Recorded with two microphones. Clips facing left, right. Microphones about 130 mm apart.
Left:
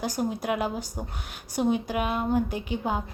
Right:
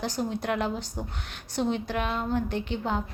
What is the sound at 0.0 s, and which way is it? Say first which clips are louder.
A woman's voice: left 1 dB; 10° left (ahead or behind).